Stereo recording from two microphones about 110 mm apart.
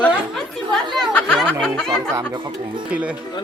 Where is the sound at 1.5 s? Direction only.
10° left (ahead or behind).